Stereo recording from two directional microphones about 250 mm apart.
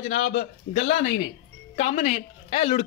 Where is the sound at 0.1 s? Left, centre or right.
Left.